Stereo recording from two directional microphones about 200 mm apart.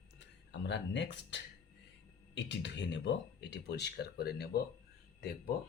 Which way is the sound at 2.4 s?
60° left (ahead or behind).